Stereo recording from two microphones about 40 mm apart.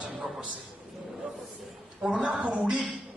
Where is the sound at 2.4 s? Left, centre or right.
Right.